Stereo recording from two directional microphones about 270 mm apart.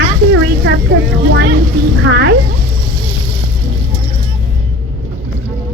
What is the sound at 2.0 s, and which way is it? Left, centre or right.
Speech, right.